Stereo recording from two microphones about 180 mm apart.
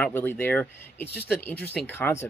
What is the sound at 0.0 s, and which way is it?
Speech, 10° left (ahead or behind).